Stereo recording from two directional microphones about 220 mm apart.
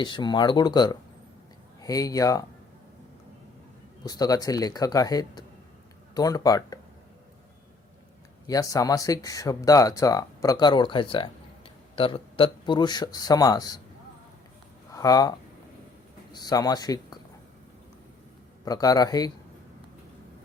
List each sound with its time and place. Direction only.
0.0 s speech: 20° left (ahead or behind)
4.0 s speech: 15° left (ahead or behind)
8.4 s speech: 15° left (ahead or behind)
14.9 s speech: 15° left (ahead or behind)
18.6 s speech: 15° left (ahead or behind)